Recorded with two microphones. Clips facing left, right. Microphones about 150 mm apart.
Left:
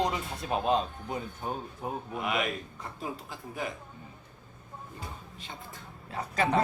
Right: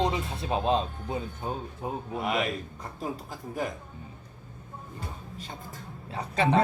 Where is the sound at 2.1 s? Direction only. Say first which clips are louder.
Right 3 dB; 40° right (ahead or behind).